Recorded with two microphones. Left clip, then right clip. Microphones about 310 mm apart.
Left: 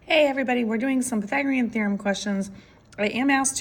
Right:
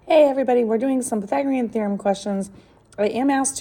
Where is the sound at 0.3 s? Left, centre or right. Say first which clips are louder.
Right 6 dB; centre.